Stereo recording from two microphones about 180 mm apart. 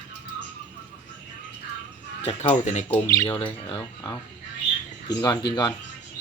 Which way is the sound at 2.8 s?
15° left (ahead or behind).